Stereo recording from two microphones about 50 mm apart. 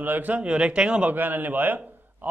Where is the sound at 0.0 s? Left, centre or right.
Right.